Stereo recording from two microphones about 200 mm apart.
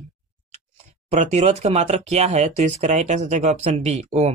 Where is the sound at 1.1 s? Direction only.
35° right (ahead or behind).